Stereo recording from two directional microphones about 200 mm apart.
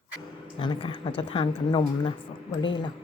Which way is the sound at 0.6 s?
25° left (ahead or behind).